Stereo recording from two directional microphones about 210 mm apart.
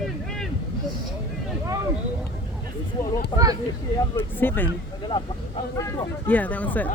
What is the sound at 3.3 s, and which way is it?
Speech, 25° left (ahead or behind).